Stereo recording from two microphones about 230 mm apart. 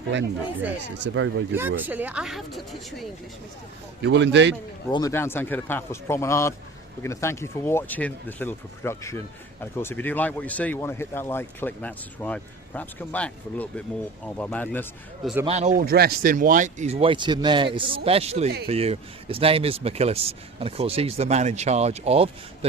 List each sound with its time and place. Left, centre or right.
0.8 s speech: right
1.5 s speech: centre
4.0 s speech: right
4.9 s speech: centre
15.4 s speech: right
15.8 s speech: right